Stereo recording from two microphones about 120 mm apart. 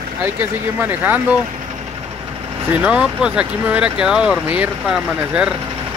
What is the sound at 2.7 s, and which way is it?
Speech, 10° right (ahead or behind).